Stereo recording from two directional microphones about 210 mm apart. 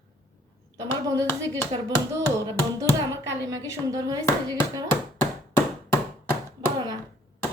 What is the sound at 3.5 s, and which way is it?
Speech, 15° right (ahead or behind).